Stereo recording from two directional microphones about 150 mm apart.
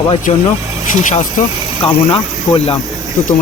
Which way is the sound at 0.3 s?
45° left (ahead or behind).